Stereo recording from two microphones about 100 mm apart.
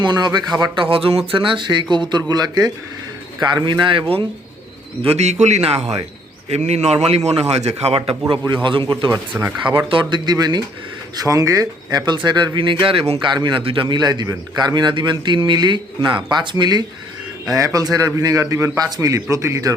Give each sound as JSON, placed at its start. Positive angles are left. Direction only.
{"t": 0.0, "sound": "a man's voice", "side_deg": -45}
{"t": 0.6, "sound": "a man's voice", "side_deg": -60}
{"t": 5.0, "sound": "speech", "side_deg": -90}
{"t": 8.6, "sound": "a man's voice", "side_deg": -55}
{"t": 9.3, "sound": "speech", "side_deg": -10}
{"t": 9.9, "sound": "a man's voice", "side_deg": -50}
{"t": 13.2, "sound": "a man's voice", "side_deg": -50}
{"t": 17.5, "sound": "a man's voice", "side_deg": -35}